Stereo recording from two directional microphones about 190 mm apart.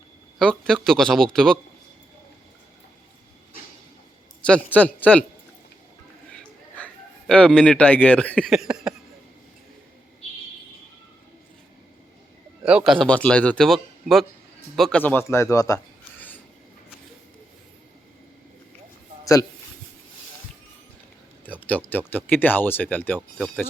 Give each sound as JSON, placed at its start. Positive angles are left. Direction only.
{"t": 0.3, "sound": "a man's voice", "side_deg": 5}
{"t": 4.4, "sound": "speech", "side_deg": 5}
{"t": 6.3, "sound": "a man's voice", "side_deg": 5}
{"t": 12.6, "sound": "a man's voice", "side_deg": -5}
{"t": 19.2, "sound": "speech", "side_deg": 15}
{"t": 21.4, "sound": "speech", "side_deg": 10}